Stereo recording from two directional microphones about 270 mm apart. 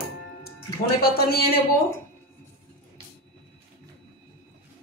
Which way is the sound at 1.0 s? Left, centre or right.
Left.